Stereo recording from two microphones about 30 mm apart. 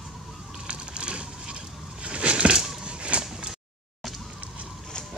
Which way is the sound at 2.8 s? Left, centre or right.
Right.